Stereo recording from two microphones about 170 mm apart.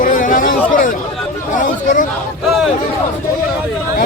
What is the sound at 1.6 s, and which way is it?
Speech, 50° left (ahead or behind).